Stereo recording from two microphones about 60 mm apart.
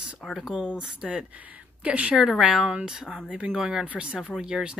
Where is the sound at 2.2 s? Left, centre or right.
Centre.